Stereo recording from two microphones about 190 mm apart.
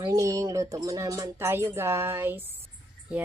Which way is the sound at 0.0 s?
15° right (ahead or behind).